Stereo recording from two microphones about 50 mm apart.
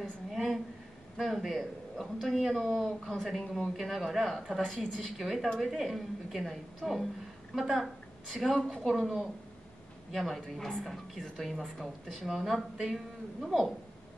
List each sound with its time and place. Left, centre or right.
0.3 s a sound: centre
1.1 s a man's voice: centre
10.1 s a woman's voice: centre